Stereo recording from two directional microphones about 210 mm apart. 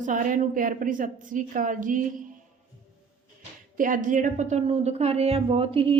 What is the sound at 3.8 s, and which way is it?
A woman's voice, 40° right (ahead or behind).